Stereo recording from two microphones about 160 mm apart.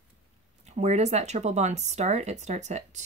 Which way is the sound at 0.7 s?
45° right (ahead or behind).